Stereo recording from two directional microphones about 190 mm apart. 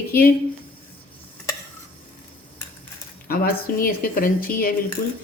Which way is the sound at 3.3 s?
50° left (ahead or behind).